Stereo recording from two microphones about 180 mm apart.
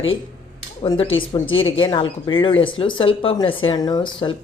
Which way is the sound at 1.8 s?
25° left (ahead or behind).